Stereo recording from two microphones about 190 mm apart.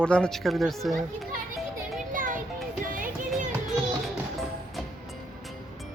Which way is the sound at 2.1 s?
45° right (ahead or behind).